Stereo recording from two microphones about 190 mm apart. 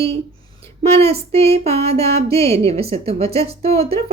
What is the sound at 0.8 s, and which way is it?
A woman's voice, 30° right (ahead or behind).